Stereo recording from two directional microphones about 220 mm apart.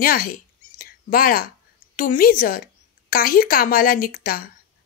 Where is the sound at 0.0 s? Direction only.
40° left (ahead or behind).